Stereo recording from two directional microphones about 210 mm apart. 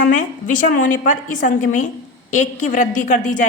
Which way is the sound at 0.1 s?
35° left (ahead or behind).